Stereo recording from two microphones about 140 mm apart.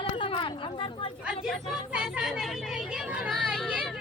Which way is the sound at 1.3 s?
5° right (ahead or behind).